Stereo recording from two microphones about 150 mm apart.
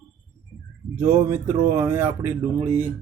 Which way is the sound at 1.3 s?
15° right (ahead or behind).